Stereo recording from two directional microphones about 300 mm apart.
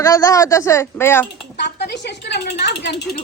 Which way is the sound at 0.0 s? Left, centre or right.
Centre.